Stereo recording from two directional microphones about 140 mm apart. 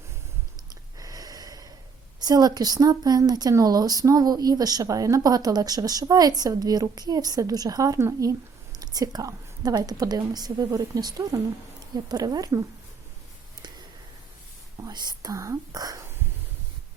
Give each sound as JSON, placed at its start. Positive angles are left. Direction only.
{"t": 0.9, "sound": "snort", "side_deg": -25}
{"t": 2.2, "sound": "a woman's voice", "side_deg": -30}
{"t": 14.8, "sound": "speech", "side_deg": -30}